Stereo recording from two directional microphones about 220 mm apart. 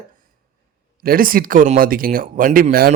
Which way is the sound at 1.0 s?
40° right (ahead or behind).